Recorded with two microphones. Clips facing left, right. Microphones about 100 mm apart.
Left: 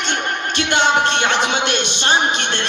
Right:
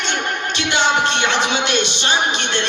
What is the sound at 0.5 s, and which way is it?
Music, 50° left (ahead or behind).